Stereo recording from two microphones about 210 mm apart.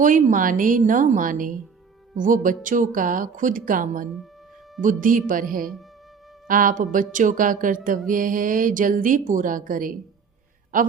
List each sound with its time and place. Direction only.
0.0 s music: 40° right (ahead or behind)